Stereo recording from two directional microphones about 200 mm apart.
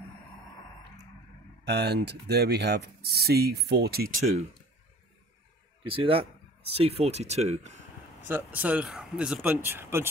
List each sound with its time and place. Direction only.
1.6 s speech: 55° right (ahead or behind)
5.9 s speech: 25° right (ahead or behind)
8.3 s speech: 10° right (ahead or behind)